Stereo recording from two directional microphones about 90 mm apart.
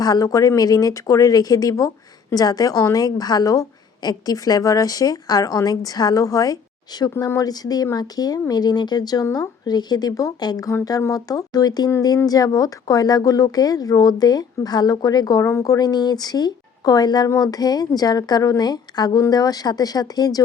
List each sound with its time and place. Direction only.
0.0 s a woman's voice: 45° left (ahead or behind)
15.4 s a woman's voice: 35° left (ahead or behind)